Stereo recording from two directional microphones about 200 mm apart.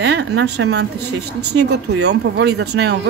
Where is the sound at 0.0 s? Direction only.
55° right (ahead or behind).